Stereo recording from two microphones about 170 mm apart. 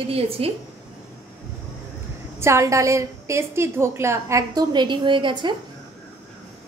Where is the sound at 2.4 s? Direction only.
15° right (ahead or behind).